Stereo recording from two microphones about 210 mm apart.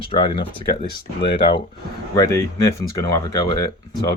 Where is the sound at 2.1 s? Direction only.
15° left (ahead or behind).